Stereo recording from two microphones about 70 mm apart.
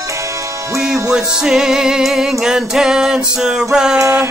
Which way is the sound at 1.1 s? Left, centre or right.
Centre.